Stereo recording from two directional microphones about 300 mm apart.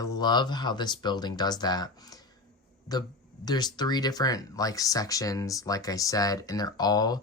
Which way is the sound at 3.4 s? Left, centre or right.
Centre.